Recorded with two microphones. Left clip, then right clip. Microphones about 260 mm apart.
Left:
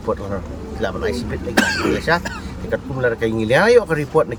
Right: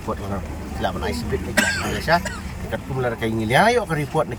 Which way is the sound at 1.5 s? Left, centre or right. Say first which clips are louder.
Left 4 dB; centre.